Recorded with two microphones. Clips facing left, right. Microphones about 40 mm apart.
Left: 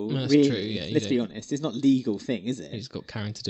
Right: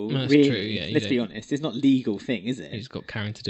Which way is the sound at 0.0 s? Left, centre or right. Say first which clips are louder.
Right 2 dB; right.